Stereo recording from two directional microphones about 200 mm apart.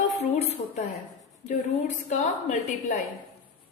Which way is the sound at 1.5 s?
35° left (ahead or behind).